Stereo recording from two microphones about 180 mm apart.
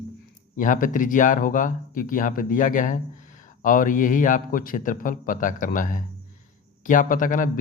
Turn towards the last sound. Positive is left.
turn(degrees=50)  # may be behind; listen again after turning